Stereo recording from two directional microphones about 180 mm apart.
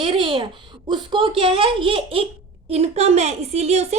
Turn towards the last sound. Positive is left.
turn(degrees=-35)  # may be behind; listen again after turning